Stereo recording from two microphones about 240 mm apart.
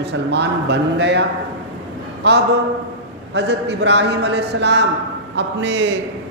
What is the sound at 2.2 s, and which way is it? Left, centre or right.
A man's voice, right.